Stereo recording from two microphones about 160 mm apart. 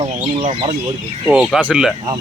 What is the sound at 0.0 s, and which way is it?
Speech, 35° right (ahead or behind).